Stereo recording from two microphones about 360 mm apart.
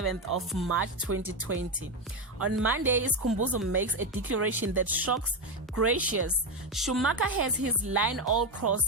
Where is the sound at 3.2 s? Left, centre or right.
Right.